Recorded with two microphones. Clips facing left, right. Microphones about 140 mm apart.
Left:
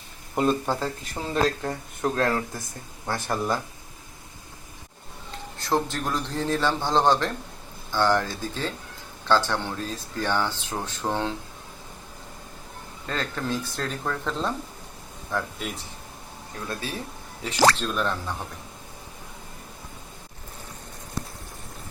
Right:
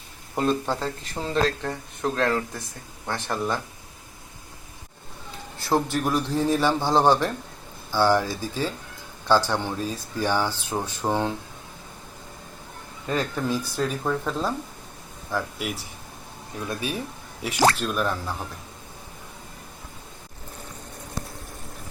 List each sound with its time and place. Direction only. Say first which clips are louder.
0.3 s speech: left 1 dB; 5° left (ahead or behind)
5.5 s speech: right 2 dB; 10° right (ahead or behind)
13.1 s speech: right 3 dB; 10° right (ahead or behind)